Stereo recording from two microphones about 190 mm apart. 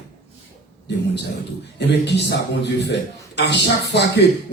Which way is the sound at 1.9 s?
60° left (ahead or behind).